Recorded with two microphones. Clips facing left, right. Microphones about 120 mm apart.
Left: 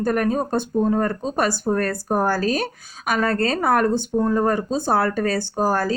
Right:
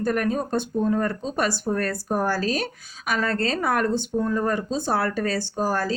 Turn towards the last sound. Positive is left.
turn(degrees=45)  # may be behind; listen again after turning